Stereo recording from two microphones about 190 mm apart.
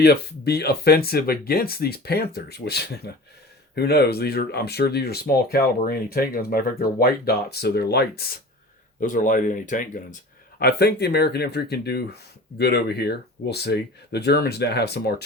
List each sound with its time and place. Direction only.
0.0 s speech: 60° left (ahead or behind)
9.0 s speech: 45° left (ahead or behind)
10.6 s speech: 55° left (ahead or behind)